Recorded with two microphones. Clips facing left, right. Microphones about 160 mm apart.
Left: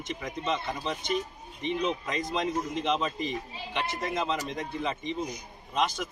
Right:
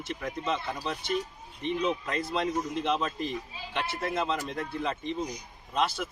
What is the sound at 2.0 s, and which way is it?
Speech, 5° right (ahead or behind).